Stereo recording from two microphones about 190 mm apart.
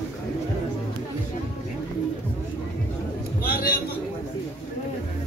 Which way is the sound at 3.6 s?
50° left (ahead or behind).